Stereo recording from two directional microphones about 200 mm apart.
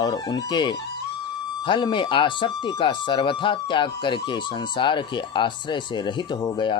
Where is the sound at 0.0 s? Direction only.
20° left (ahead or behind).